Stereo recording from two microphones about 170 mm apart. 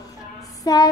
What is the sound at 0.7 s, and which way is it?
Speech, 20° left (ahead or behind).